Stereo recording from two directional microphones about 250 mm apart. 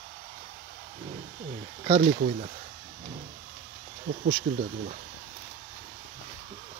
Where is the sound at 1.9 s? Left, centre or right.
Right.